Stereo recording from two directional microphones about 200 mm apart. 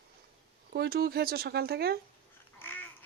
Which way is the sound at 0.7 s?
50° right (ahead or behind).